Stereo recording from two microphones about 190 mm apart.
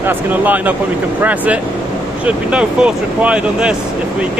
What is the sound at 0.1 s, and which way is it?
Speech, 10° right (ahead or behind).